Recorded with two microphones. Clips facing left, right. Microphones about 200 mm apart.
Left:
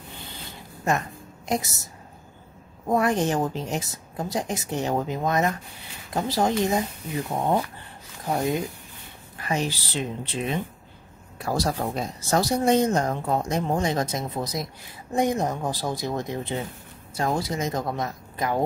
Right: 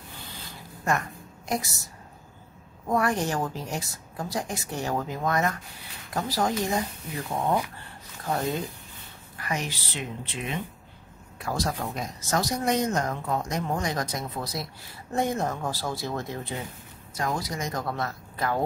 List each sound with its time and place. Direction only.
0.8 s a sound: 20° left (ahead or behind)
2.9 s speech: 20° left (ahead or behind)
9.4 s speech: 30° left (ahead or behind)